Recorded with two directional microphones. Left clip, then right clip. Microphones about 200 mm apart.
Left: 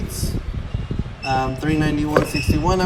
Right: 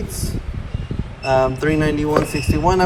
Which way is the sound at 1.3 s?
10° left (ahead or behind).